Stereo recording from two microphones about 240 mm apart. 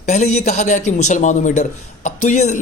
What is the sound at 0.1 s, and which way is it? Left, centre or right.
A man's voice, left.